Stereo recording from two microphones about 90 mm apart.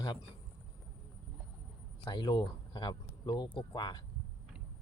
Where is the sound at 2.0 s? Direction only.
60° left (ahead or behind).